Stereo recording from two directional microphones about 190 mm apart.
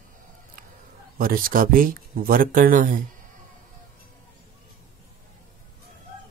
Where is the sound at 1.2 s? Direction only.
50° right (ahead or behind).